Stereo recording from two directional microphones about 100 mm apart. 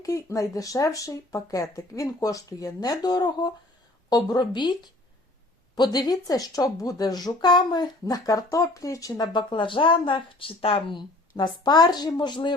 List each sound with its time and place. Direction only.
0.0 s speech: 30° left (ahead or behind); by 12.5 s 50° left (ahead or behind)